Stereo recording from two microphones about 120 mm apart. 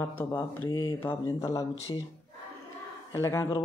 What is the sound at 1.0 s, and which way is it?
Speech, 25° left (ahead or behind).